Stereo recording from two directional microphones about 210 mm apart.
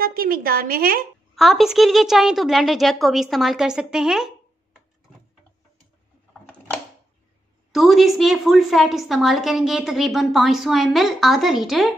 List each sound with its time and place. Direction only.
0.0 s a woman's voice: 45° right (ahead or behind)
1.3 s a woman's voice: centre (ahead or behind)
7.7 s a woman's voice: centre (ahead or behind)